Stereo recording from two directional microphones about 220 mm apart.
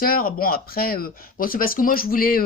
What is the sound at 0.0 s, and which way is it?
Speech, 40° left (ahead or behind).